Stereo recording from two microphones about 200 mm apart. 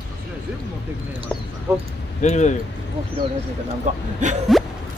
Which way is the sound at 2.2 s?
35° left (ahead or behind).